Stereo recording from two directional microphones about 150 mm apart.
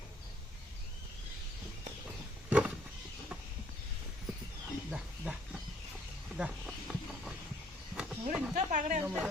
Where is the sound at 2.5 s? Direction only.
10° right (ahead or behind).